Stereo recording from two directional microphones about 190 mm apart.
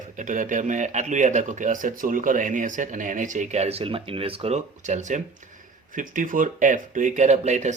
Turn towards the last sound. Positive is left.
turn(degrees=-35)  # may be behind; listen again after turning